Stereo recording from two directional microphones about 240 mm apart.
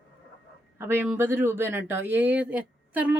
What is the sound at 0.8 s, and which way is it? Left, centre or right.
Speech, centre.